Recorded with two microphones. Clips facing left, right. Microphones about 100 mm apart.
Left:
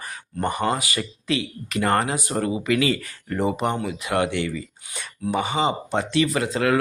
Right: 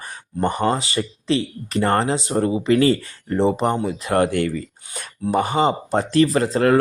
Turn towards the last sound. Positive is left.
turn(degrees=-35)  # may be behind; listen again after turning